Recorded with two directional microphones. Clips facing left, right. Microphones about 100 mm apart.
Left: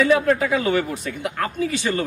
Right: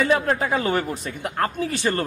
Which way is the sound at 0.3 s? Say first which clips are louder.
Left 3 dB; 35° right (ahead or behind).